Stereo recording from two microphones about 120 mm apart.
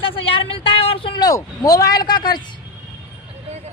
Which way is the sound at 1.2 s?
30° left (ahead or behind).